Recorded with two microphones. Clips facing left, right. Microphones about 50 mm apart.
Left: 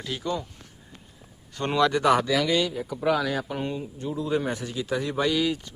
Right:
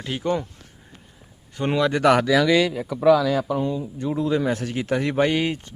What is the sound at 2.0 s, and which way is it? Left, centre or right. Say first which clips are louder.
Speech: right 5 dB; right.